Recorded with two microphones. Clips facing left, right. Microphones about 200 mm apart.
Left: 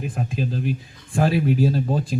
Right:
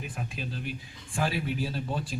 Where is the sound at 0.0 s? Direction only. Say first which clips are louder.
Left 10 dB; 40° left (ahead or behind).